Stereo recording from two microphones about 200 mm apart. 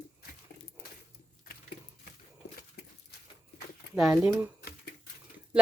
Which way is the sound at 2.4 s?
60° left (ahead or behind).